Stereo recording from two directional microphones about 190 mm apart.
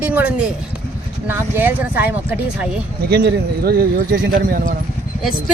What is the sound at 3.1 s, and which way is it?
Speech, 60° right (ahead or behind).